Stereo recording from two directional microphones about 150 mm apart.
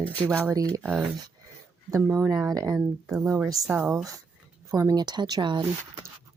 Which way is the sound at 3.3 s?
20° right (ahead or behind).